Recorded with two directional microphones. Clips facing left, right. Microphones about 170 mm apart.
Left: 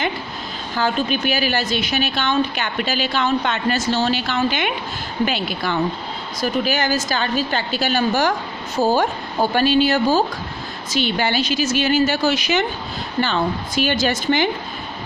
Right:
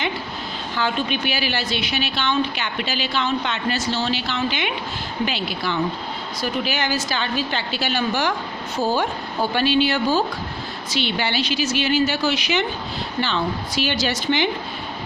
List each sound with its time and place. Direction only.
0.8 s a woman's voice: 40° left (ahead or behind)